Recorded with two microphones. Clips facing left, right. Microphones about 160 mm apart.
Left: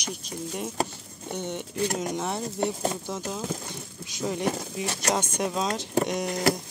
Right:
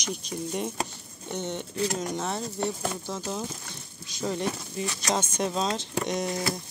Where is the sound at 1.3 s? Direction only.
10° left (ahead or behind).